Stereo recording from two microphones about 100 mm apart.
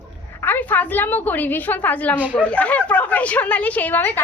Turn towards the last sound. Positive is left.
turn(degrees=20)  # may be behind; listen again after turning